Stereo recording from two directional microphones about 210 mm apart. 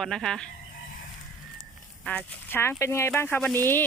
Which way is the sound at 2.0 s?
5° left (ahead or behind).